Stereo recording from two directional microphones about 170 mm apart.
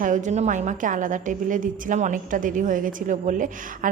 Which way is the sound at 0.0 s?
45° right (ahead or behind).